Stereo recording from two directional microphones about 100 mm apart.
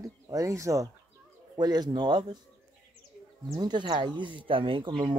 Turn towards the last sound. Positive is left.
turn(degrees=-60)  # may be behind; listen again after turning